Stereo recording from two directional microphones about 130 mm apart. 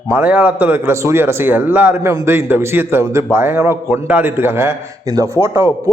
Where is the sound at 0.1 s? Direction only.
10° right (ahead or behind).